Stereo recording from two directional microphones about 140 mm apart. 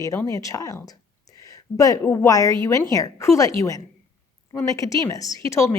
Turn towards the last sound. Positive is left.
turn(degrees=20)  # may be behind; listen again after turning